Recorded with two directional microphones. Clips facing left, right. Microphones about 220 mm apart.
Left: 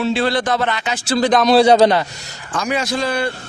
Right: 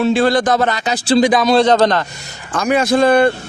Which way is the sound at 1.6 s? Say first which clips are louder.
Left 1 dB; 10° left (ahead or behind).